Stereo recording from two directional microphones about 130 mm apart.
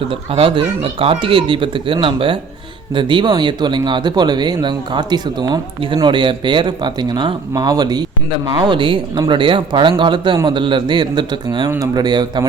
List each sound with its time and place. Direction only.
0.1 s speech: 45° right (ahead or behind)